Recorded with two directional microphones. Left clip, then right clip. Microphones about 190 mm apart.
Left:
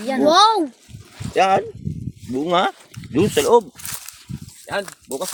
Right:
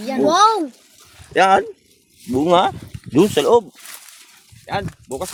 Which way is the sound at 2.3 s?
40° right (ahead or behind).